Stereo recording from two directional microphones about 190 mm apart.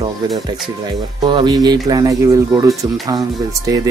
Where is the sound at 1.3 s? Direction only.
25° right (ahead or behind).